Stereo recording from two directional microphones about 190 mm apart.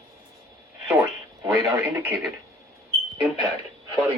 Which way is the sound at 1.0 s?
15° right (ahead or behind).